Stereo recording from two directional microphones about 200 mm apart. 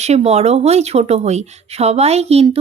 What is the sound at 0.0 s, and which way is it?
Speech, 30° right (ahead or behind).